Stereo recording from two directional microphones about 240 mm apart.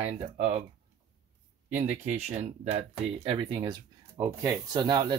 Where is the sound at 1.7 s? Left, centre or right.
Right.